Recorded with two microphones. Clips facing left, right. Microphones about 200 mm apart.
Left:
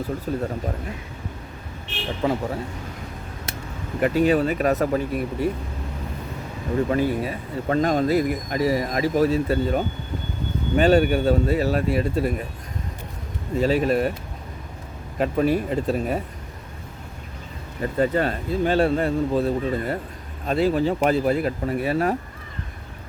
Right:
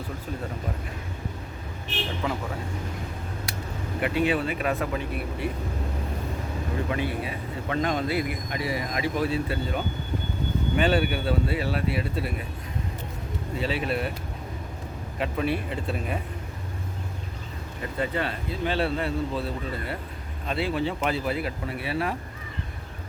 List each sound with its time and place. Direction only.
0.3 s speech: 40° left (ahead or behind)
2.2 s speech: 35° left (ahead or behind)
4.0 s speech: 40° left (ahead or behind)
6.9 s speech: 40° left (ahead or behind)
13.6 s speech: 45° left (ahead or behind)
15.2 s speech: 40° left (ahead or behind)
17.9 s speech: 40° left (ahead or behind)